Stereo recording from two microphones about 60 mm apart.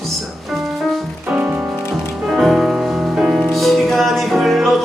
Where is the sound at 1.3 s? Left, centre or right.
Right.